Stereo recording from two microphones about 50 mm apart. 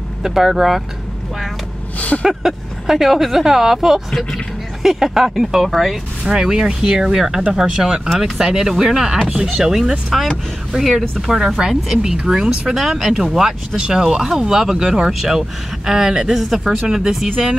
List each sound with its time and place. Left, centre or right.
0.2 s speech: centre
2.0 s speech: left
2.2 s speech: centre
13.7 s speech: centre
14.0 s speech: centre